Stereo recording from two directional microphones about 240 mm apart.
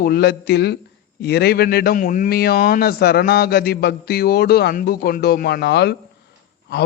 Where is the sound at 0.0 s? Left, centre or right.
Left.